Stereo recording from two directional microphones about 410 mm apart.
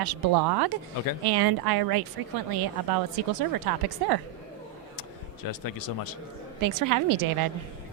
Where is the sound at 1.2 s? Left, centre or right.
Right.